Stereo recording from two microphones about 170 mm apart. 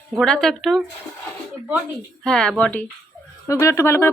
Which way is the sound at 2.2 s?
5° left (ahead or behind).